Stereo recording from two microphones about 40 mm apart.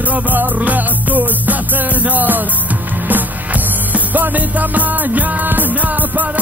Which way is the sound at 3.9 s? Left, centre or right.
Right.